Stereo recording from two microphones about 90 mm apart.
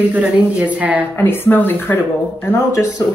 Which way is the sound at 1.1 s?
25° left (ahead or behind).